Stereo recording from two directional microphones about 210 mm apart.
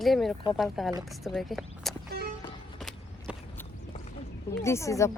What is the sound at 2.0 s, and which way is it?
Music, 50° right (ahead or behind).